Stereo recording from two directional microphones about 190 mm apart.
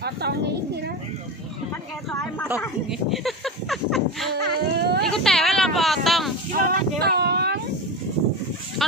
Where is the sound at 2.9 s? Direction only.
Centre (ahead or behind).